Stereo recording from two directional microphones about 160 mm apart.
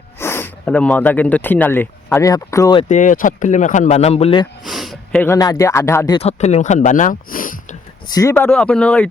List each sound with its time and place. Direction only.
0.2 s speech: 15° left (ahead or behind)
2.9 s speech: 55° left (ahead or behind); by 4.4 s 35° left (ahead or behind)
4.6 s a sound: centre (ahead or behind)
5.2 s speech: 20° left (ahead or behind)
6.1 s speech: 40° left (ahead or behind); by 7.8 s 60° left (ahead or behind)
8.0 s speech: 20° left (ahead or behind)